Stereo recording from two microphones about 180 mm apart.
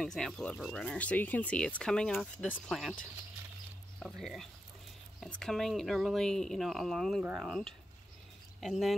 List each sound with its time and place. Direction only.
0.0 s speech: 5° left (ahead or behind)